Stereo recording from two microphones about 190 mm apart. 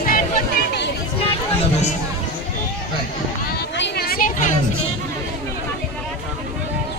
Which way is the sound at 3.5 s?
65° left (ahead or behind).